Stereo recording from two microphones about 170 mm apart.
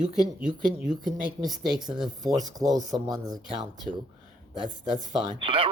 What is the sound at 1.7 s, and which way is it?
Speech, 25° right (ahead or behind).